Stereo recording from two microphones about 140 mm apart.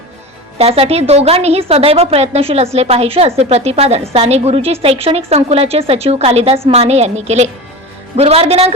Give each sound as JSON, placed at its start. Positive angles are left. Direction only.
{"t": 0.6, "sound": "a woman's voice", "side_deg": -45}